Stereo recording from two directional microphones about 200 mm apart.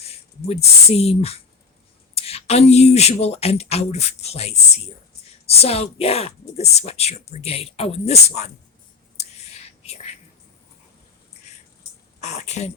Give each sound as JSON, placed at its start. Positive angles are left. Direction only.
{"t": 0.1, "sound": "speech", "side_deg": 30}
{"t": 9.6, "sound": "whispering", "side_deg": 30}
{"t": 12.2, "sound": "speech", "side_deg": 35}